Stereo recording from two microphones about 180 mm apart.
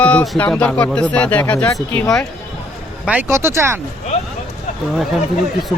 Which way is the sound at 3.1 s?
10° right (ahead or behind).